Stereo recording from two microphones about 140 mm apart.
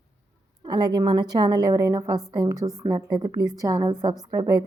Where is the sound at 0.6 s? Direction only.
30° right (ahead or behind).